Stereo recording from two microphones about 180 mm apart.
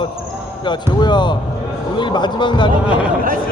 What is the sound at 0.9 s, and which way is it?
Speech, 25° left (ahead or behind).